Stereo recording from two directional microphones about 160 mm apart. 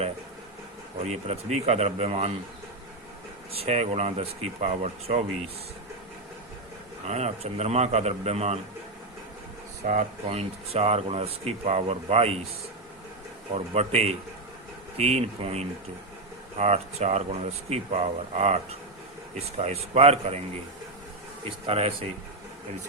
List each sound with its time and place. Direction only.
0.9 s speech: 45° right (ahead or behind)
3.5 s speech: 40° right (ahead or behind)
7.1 s speech: 45° right (ahead or behind)
9.8 s speech: 50° right (ahead or behind)
10.2 s speech: 40° right (ahead or behind)
13.5 s speech: 40° right (ahead or behind)
21.7 s speech: 35° right (ahead or behind)